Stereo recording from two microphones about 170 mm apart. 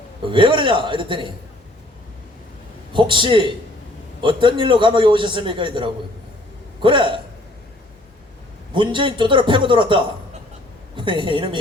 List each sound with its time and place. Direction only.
0.3 s a man's voice: 30° right (ahead or behind)
2.9 s a man's voice: 30° right (ahead or behind)
8.7 s a man's voice: 30° right (ahead or behind)